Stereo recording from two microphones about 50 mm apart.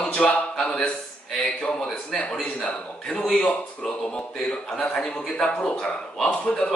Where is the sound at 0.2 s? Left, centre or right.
Centre.